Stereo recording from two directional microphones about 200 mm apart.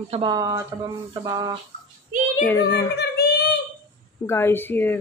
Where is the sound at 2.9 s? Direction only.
55° left (ahead or behind).